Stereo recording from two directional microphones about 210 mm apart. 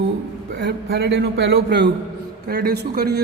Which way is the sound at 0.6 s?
50° right (ahead or behind).